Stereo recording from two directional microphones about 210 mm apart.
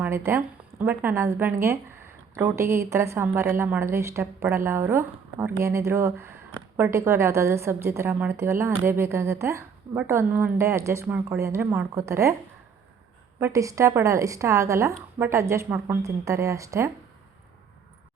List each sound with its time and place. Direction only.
0.0 s a woman's voice: 10° right (ahead or behind)
13.4 s a woman's voice: 15° right (ahead or behind)